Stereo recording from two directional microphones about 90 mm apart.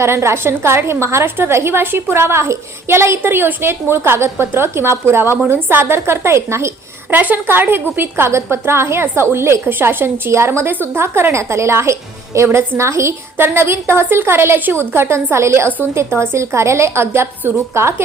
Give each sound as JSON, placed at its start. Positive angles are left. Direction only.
{"t": 0.0, "sound": "a woman's voice", "side_deg": -30}
{"t": 7.1, "sound": "a woman's voice", "side_deg": -20}